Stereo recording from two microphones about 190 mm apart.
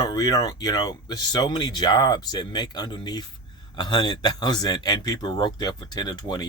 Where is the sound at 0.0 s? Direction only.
20° left (ahead or behind).